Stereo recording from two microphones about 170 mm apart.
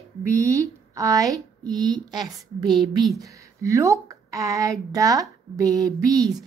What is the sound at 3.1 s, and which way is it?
A woman's voice, 20° right (ahead or behind).